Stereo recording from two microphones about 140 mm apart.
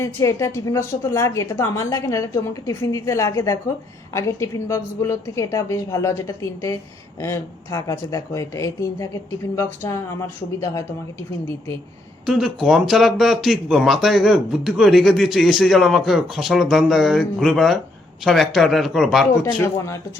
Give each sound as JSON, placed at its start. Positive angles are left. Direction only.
{"t": 0.0, "sound": "speech", "side_deg": 20}
{"t": 12.2, "sound": "speech", "side_deg": 0}
{"t": 19.6, "sound": "speech", "side_deg": 20}